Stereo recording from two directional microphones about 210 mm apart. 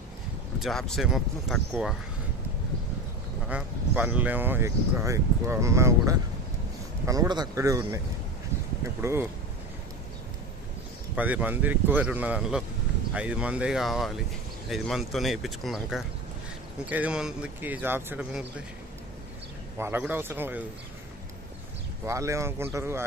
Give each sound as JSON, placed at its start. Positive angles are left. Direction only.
{"t": 0.6, "sound": "speech", "side_deg": 0}
{"t": 3.4, "sound": "speech", "side_deg": -5}
{"t": 9.0, "sound": "speech", "side_deg": -10}
{"t": 11.1, "sound": "speech", "side_deg": -5}
{"t": 19.8, "sound": "speech", "side_deg": -10}
{"t": 22.0, "sound": "speech", "side_deg": -15}